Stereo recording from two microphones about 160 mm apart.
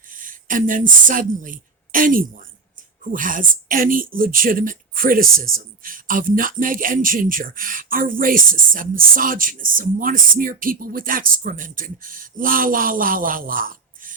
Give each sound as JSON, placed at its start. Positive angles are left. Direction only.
{"t": 0.1, "sound": "speech", "side_deg": -55}